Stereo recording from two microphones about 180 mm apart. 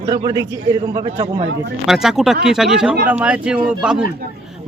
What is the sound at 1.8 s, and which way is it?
A man's voice, centre (ahead or behind).